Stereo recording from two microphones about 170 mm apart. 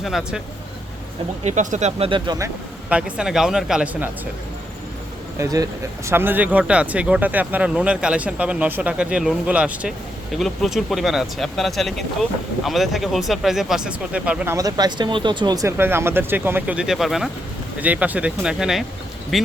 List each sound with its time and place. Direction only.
0.0 s speech: centre (ahead or behind)
1.5 s speech: 45° right (ahead or behind); by 2.5 s 25° right (ahead or behind)
2.9 s speech: 5° right (ahead or behind)
5.4 s speech: 20° right (ahead or behind)
14.5 s speech: 20° right (ahead or behind); by 19.5 s centre (ahead or behind)